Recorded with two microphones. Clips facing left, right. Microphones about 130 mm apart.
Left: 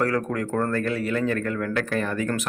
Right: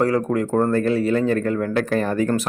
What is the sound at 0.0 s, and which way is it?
Speech, 25° right (ahead or behind).